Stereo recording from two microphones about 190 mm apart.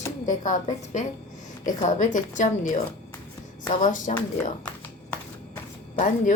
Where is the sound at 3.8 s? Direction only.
40° left (ahead or behind).